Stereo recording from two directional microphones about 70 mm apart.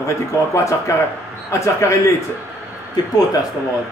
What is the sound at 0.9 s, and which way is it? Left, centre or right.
A man's voice, left.